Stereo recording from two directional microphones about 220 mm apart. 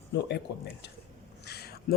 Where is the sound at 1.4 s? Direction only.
45° left (ahead or behind).